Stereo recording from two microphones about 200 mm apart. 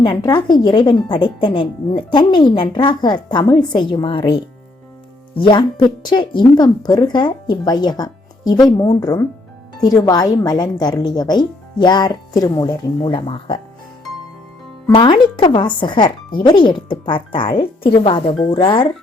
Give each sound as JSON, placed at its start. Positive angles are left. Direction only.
{"t": 0.0, "sound": "speech", "side_deg": 20}
{"t": 14.8, "sound": "speech", "side_deg": 25}